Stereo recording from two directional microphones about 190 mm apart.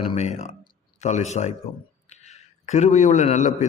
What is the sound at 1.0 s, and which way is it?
A man's voice, 35° left (ahead or behind).